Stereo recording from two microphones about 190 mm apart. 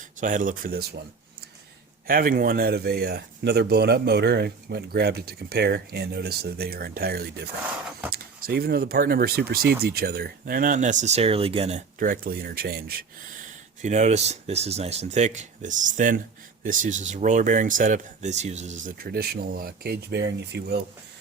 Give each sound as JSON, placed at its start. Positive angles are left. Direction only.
{"t": 0.2, "sound": "speech", "side_deg": -45}
{"t": 2.0, "sound": "speech", "side_deg": -50}
{"t": 11.9, "sound": "speech", "side_deg": -45}
{"t": 13.8, "sound": "speech", "side_deg": -35}